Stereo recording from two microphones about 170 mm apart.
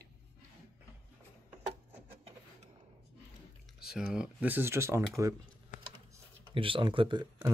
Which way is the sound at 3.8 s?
5° right (ahead or behind).